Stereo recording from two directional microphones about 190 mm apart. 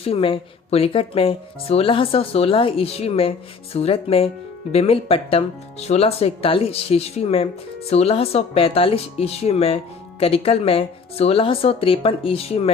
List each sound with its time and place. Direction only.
0.0 s speech: 30° left (ahead or behind)